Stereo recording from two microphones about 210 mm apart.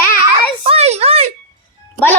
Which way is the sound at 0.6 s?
30° right (ahead or behind).